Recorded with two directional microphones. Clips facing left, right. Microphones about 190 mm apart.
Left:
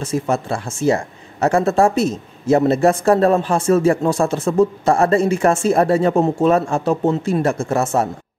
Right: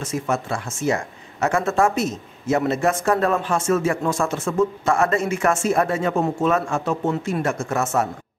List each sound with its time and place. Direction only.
0.0 s speech: 30° left (ahead or behind)